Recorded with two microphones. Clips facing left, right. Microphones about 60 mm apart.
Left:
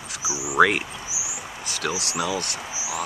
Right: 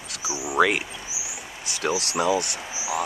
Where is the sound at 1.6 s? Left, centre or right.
Right.